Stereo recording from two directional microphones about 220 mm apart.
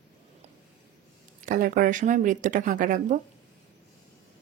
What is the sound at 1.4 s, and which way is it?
Speech, 35° right (ahead or behind).